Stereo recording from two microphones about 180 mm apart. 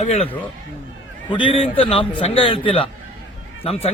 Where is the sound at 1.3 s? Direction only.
30° left (ahead or behind).